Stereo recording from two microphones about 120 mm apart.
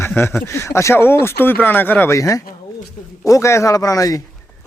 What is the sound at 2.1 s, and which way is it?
Speech, 30° left (ahead or behind).